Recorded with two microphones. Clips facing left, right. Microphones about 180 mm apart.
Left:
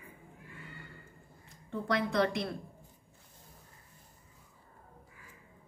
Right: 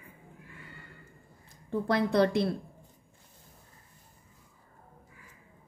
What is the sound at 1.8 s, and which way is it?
Speech, 35° right (ahead or behind).